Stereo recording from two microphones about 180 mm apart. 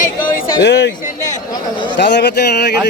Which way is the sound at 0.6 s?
70° left (ahead or behind).